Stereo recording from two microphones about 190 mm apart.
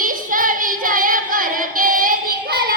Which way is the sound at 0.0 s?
45° right (ahead or behind).